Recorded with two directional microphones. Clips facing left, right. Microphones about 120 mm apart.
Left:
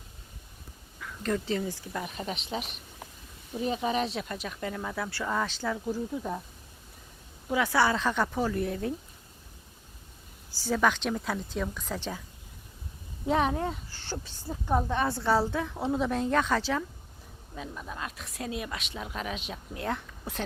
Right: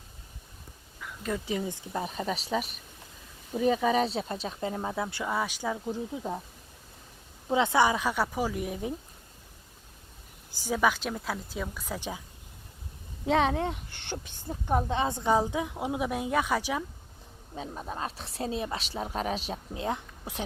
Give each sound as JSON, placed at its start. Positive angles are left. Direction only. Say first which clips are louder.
{"t": 1.0, "sound": "speech", "louder": "left 2 dB", "side_deg": -10}
{"t": 7.4, "sound": "a woman's voice", "louder": "right 2 dB", "side_deg": -25}
{"t": 10.5, "sound": "a woman's voice", "louder": "even", "side_deg": -15}
{"t": 14.0, "sound": "speech", "louder": "left 1 dB", "side_deg": -20}
{"t": 14.5, "sound": "a woman's voice", "louder": "even", "side_deg": -5}
{"t": 14.8, "sound": "a woman's voice", "louder": "even", "side_deg": -20}
{"t": 17.5, "sound": "a woman's voice", "louder": "right 2 dB", "side_deg": -35}
{"t": 19.7, "sound": "speech", "louder": "even", "side_deg": -20}